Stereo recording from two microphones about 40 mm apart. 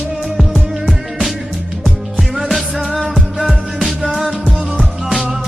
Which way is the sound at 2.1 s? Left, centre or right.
Centre.